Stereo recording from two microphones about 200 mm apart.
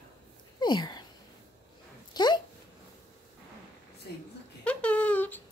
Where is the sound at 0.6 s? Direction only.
20° left (ahead or behind).